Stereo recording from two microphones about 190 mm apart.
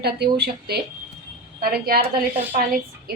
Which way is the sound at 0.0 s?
60° right (ahead or behind).